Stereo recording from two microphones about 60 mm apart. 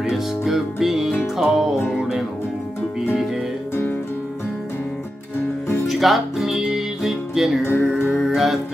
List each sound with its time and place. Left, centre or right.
0.0 s music: centre
5.9 s music: centre
7.6 s music: left
7.9 s music: centre